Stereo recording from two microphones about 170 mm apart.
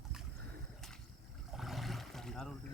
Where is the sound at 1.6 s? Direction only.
Centre (ahead or behind).